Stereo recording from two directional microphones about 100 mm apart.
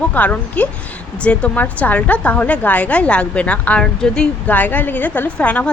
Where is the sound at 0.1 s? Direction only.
15° left (ahead or behind).